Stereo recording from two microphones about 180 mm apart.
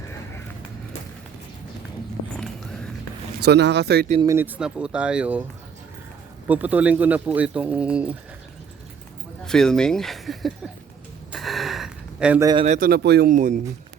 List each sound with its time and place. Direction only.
2.3 s a sound: 5° left (ahead or behind)
3.4 s speech: 70° right (ahead or behind)
4.2 s speech: 15° right (ahead or behind)
6.5 s speech: 10° right (ahead or behind)
9.5 s speech: 5° left (ahead or behind)
11.3 s gasp: centre (ahead or behind)
12.4 s a man's voice: 20° right (ahead or behind)
12.6 s speech: 40° right (ahead or behind)
12.9 s speech: 65° right (ahead or behind)
13.3 s speech: 45° right (ahead or behind)